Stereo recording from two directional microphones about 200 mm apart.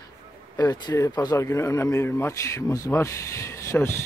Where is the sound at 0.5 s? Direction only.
20° left (ahead or behind).